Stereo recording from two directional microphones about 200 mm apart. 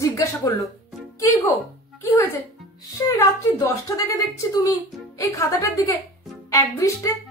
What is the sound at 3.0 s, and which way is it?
A woman's voice, 15° left (ahead or behind).